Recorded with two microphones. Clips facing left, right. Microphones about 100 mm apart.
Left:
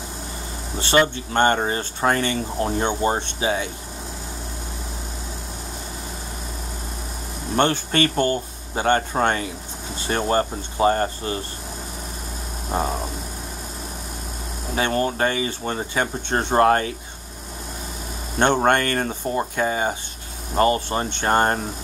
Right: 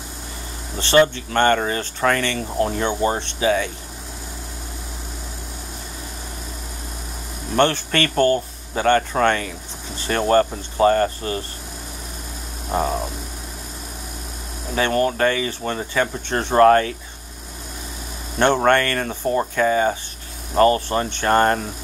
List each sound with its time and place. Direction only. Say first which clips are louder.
0.7 s speech: right 3 dB; 20° left (ahead or behind)
7.5 s speech: right 1 dB; 20° left (ahead or behind)
14.8 s speech: right 3 dB; 25° left (ahead or behind)
18.7 s speech: right 2 dB; 25° left (ahead or behind)